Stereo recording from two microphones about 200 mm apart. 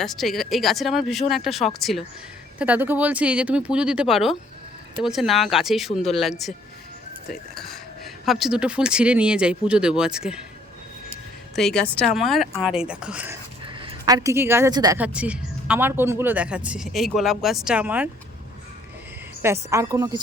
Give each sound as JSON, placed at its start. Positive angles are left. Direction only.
{"t": 0.0, "sound": "speech", "side_deg": 0}
{"t": 7.5, "sound": "speech", "side_deg": 0}
{"t": 11.5, "sound": "speech", "side_deg": 5}
{"t": 13.7, "sound": "a woman's voice", "side_deg": -25}
{"t": 14.9, "sound": "speech", "side_deg": -5}
{"t": 19.7, "sound": "speech", "side_deg": -15}